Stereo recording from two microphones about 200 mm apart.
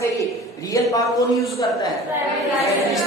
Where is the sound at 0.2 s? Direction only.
15° left (ahead or behind).